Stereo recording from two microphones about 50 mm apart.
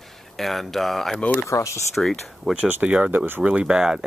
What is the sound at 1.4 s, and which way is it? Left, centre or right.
Speech, left.